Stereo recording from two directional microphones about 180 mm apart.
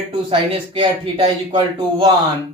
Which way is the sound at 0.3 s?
30° right (ahead or behind).